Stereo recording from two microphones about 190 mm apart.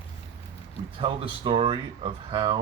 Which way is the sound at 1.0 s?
25° right (ahead or behind).